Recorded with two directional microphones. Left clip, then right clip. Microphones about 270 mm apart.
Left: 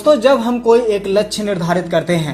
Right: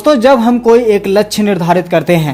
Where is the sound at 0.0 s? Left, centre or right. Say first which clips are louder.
Right 4 dB; right.